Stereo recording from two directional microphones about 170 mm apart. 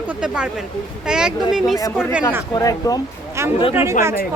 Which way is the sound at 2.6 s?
20° left (ahead or behind).